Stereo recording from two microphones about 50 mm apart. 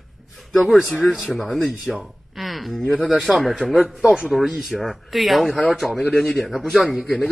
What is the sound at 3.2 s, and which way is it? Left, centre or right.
A man's voice, centre.